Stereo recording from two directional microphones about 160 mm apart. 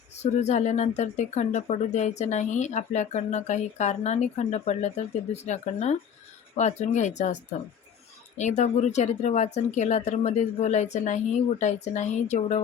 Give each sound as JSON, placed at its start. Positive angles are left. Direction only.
{"t": 0.2, "sound": "speech", "side_deg": 45}
{"t": 8.4, "sound": "speech", "side_deg": 45}